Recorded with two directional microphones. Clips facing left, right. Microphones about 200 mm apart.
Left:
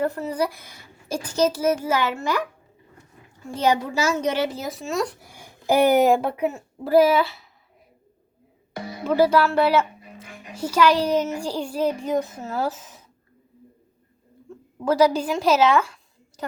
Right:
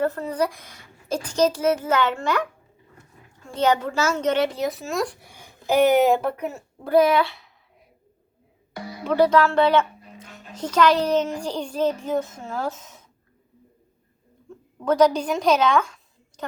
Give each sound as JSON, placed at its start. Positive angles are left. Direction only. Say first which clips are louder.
{"t": 0.0, "sound": "a woman's voice", "louder": "right 1 dB", "side_deg": 10}
{"t": 3.4, "sound": "a woman's voice", "louder": "right 1 dB", "side_deg": 10}
{"t": 8.7, "sound": "music", "louder": "left 2 dB", "side_deg": 25}
{"t": 9.0, "sound": "a woman's voice", "louder": "even", "side_deg": 5}
{"t": 14.5, "sound": "a sound", "louder": "left 1 dB", "side_deg": 0}
{"t": 14.8, "sound": "a woman's voice", "louder": "even", "side_deg": 5}